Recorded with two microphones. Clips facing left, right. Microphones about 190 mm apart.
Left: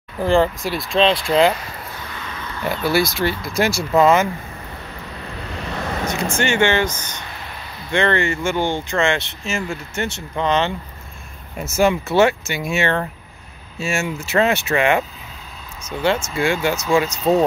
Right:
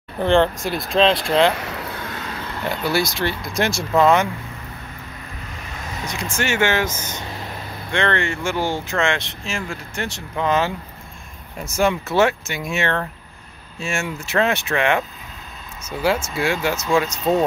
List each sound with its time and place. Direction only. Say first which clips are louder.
0.2 s speech: even; 5° left (ahead or behind)
1.6 s a sound: right 4 dB; 75° right (ahead or behind); by 2.2 s 55° right (ahead or behind)
3.1 s speech: left 2 dB; 5° left (ahead or behind)
5.3 s vehicle: left 10 dB; 70° left (ahead or behind)
6.1 s speech: left 2 dB; centre (ahead or behind)